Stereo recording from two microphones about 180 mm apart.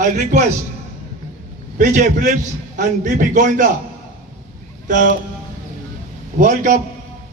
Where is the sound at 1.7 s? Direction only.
45° right (ahead or behind).